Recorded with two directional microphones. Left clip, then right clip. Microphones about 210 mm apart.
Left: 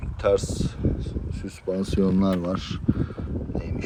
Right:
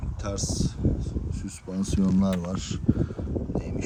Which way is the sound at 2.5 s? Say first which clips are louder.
Left 2 dB; 5° right (ahead or behind).